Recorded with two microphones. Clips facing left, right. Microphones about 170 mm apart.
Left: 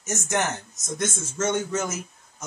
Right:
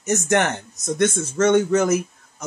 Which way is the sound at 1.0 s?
65° right (ahead or behind).